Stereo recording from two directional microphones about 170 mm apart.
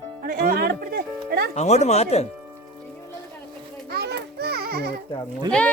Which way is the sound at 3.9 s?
65° right (ahead or behind).